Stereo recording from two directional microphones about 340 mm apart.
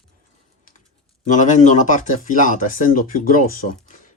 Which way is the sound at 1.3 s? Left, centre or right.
Left.